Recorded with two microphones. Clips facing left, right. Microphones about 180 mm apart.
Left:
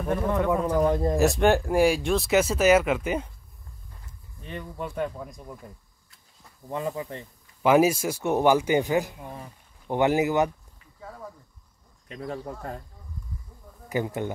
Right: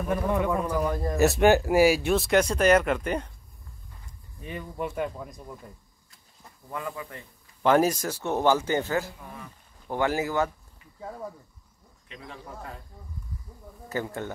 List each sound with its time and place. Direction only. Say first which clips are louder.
0.1 s speech: left 1 dB; 15° right (ahead or behind)
0.5 s speech: left 4 dB; 20° left (ahead or behind)
1.1 s speech: right 5 dB; 5° right (ahead or behind)
4.4 s speech: right 2 dB; 10° right (ahead or behind)
6.7 s speech: left 5 dB; 25° left (ahead or behind)
7.6 s speech: left 2 dB; 10° left (ahead or behind)
12.1 s speech: left 8 dB; 45° left (ahead or behind)
13.8 s speech: left 4 dB; 15° left (ahead or behind)